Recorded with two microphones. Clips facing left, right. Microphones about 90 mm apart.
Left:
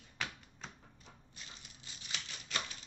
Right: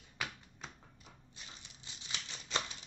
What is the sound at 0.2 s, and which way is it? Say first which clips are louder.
Typewriter: even; 5° right (ahead or behind).